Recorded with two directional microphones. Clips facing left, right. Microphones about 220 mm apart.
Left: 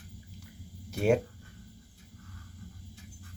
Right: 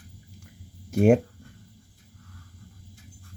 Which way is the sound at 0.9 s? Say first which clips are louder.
Right 7 dB; 50° right (ahead or behind).